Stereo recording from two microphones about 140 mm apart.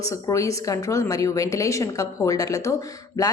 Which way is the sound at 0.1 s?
20° left (ahead or behind).